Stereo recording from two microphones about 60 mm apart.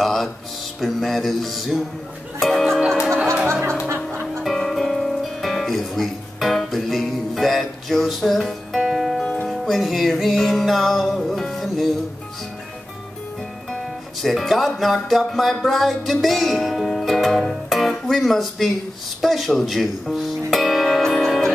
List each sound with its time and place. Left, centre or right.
0.0 s speech: centre
0.7 s music: centre
4.4 s music: centre
9.2 s music: centre
9.5 s music: centre
14.2 s music: centre
17.6 s guitar: centre
19.2 s music: centre